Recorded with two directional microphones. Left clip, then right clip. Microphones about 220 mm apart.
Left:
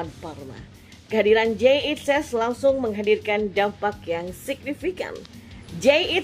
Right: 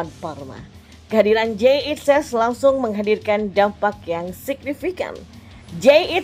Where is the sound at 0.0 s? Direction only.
20° right (ahead or behind).